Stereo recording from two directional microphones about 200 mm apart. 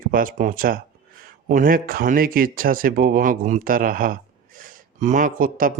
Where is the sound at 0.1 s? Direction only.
45° right (ahead or behind).